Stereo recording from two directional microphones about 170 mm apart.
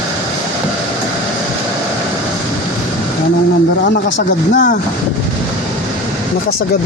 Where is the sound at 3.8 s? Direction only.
70° left (ahead or behind).